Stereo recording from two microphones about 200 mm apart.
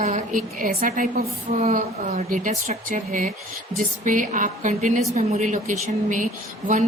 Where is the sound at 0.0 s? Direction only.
35° right (ahead or behind).